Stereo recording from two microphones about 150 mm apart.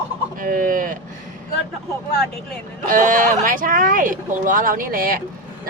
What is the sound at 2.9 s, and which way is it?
Speech, 65° right (ahead or behind).